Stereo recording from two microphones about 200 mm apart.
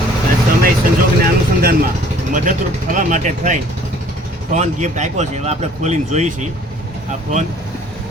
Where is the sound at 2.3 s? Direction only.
40° right (ahead or behind).